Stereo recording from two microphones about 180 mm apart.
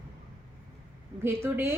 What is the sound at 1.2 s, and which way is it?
Speech, 10° right (ahead or behind).